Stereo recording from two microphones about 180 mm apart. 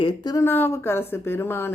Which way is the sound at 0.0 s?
25° left (ahead or behind).